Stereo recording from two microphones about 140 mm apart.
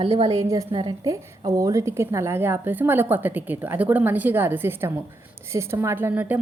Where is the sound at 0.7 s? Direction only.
35° right (ahead or behind).